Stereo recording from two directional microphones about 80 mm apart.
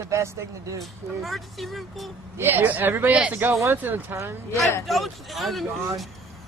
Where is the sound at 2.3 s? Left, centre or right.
Right.